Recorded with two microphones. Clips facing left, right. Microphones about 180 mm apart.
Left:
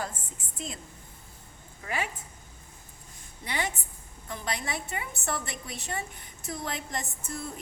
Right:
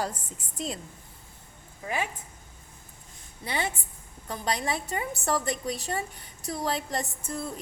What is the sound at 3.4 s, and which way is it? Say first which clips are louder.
A woman's voice: right 2 dB; 25° right (ahead or behind).